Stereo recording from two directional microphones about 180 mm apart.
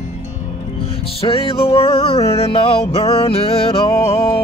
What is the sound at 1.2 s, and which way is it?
Music, 30° left (ahead or behind).